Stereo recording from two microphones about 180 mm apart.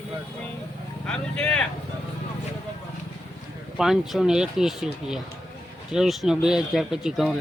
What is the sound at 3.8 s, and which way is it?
Speech, centre (ahead or behind).